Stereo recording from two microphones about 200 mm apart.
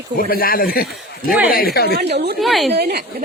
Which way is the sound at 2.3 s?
Centre (ahead or behind).